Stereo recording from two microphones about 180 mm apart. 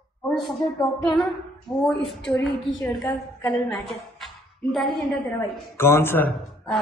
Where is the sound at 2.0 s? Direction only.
5° left (ahead or behind).